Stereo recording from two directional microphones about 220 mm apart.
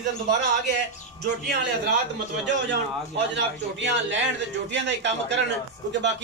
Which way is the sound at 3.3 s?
55° right (ahead or behind).